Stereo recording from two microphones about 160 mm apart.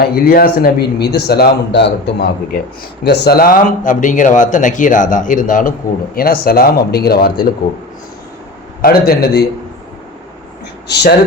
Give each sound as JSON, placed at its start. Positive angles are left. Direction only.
{"t": 0.0, "sound": "speech", "side_deg": 70}
{"t": 6.1, "sound": "speech", "side_deg": 65}
{"t": 8.8, "sound": "speech", "side_deg": 70}
{"t": 10.8, "sound": "speech", "side_deg": 90}